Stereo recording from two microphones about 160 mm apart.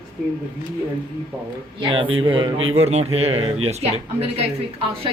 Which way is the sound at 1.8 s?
35° right (ahead or behind).